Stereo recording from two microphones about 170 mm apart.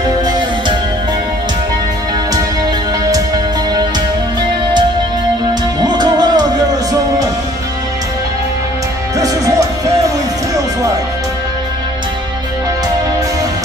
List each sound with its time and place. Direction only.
0.0 s music: 25° right (ahead or behind)
5.5 s music: 25° right (ahead or behind)
9.2 s music: 20° right (ahead or behind)